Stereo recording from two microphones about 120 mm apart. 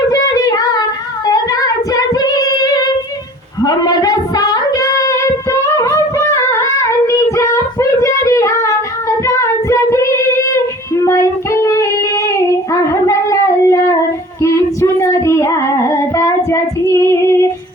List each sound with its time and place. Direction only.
0.1 s child singing: 30° left (ahead or behind)
12.4 s a sound: 25° left (ahead or behind)
14.4 s child singing: 25° left (ahead or behind)